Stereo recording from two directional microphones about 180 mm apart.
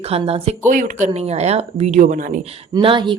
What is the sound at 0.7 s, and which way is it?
Speech, 45° right (ahead or behind).